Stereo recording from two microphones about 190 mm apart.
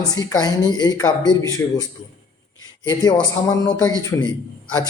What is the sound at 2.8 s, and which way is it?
A man's voice, 15° left (ahead or behind).